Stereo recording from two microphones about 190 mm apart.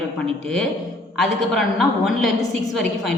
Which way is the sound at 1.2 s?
Centre (ahead or behind).